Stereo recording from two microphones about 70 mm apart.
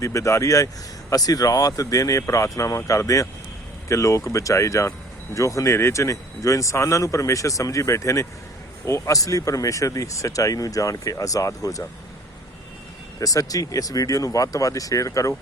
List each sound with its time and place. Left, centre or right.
0.0 s speech: left
1.1 s speech: left
13.1 s speech: left